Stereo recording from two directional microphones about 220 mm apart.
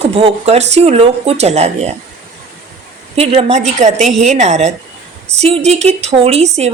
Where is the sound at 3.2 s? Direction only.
25° right (ahead or behind).